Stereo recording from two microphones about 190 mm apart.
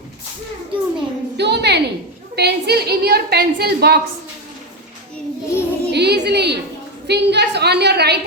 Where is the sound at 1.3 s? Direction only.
60° right (ahead or behind).